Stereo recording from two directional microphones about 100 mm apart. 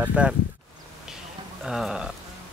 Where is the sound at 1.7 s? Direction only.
5° right (ahead or behind).